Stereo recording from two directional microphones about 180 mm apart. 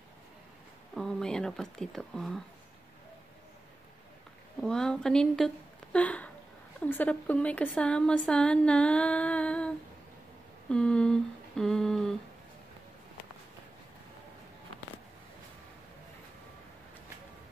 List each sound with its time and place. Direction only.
0.9 s speech: 5° left (ahead or behind)
4.6 s speech: 5° left (ahead or behind)
5.9 s a sound: 5° left (ahead or behind)
6.9 s a woman's voice: 10° left (ahead or behind)
10.7 s humming: 5° left (ahead or behind)